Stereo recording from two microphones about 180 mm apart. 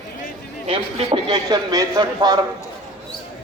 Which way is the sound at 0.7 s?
30° right (ahead or behind).